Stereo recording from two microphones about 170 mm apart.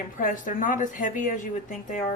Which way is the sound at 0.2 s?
50° left (ahead or behind).